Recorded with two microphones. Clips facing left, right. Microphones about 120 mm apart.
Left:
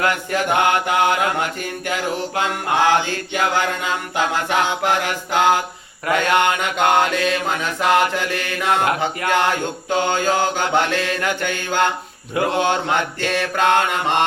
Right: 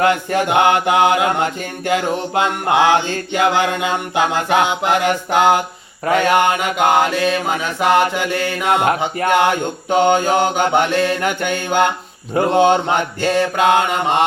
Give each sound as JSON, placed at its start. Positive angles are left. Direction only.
{"t": 0.0, "sound": "mantra", "side_deg": -25}